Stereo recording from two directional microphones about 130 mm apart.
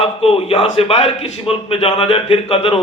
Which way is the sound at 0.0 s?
45° left (ahead or behind).